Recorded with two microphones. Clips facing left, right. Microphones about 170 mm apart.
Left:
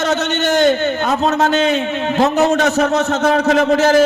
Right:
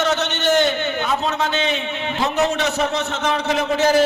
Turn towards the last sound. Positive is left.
turn(degrees=45)  # may be behind; listen again after turning